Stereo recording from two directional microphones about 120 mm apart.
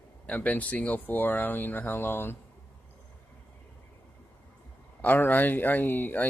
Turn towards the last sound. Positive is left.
turn(degrees=15)  # may be behind; listen again after turning